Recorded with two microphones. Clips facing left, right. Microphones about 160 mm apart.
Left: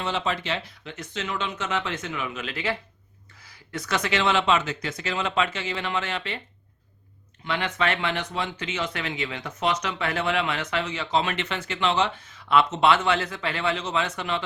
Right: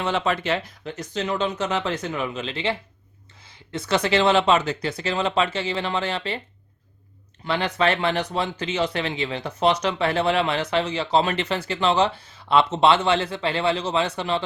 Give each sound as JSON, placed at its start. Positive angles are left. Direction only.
{"t": 0.0, "sound": "speech", "side_deg": -55}
{"t": 7.4, "sound": "speech", "side_deg": -35}